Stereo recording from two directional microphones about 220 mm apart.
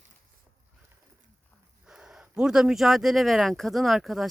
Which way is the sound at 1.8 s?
5° right (ahead or behind).